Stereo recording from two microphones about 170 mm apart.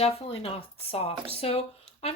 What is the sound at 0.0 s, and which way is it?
Speech, 35° left (ahead or behind).